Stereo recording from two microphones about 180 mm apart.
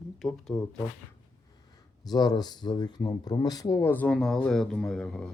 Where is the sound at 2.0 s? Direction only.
20° left (ahead or behind); by 5.3 s 5° left (ahead or behind).